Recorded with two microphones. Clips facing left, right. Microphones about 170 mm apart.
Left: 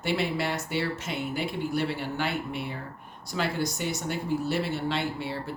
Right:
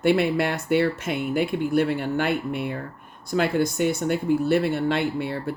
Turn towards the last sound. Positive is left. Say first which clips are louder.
# right 6 dB
turn(degrees=-55)  # may be behind; listen again after turning